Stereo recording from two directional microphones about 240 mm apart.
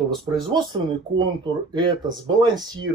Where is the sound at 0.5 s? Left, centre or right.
Centre.